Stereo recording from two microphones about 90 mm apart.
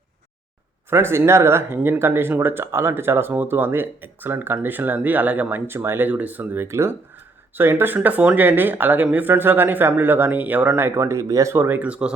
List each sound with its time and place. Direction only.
0.9 s speech: 25° right (ahead or behind)
11.5 s speech: 25° right (ahead or behind)